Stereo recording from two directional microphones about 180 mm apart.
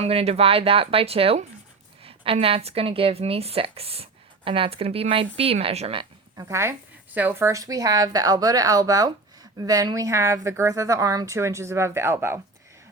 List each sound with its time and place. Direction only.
0.0 s speech: 35° right (ahead or behind)
6.5 s speech: 15° right (ahead or behind)